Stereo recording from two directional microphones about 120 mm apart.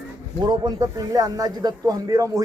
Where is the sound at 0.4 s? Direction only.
35° right (ahead or behind).